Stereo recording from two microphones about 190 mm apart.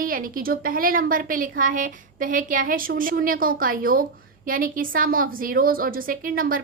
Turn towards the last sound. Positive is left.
turn(degrees=-50)  # may be behind; listen again after turning